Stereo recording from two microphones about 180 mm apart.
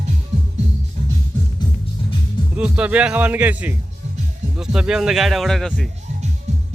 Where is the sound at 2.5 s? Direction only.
5° right (ahead or behind).